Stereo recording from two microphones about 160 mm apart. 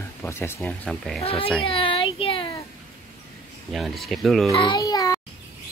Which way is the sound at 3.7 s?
Centre (ahead or behind).